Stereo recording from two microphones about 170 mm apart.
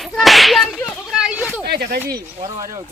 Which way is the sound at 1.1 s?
5° right (ahead or behind).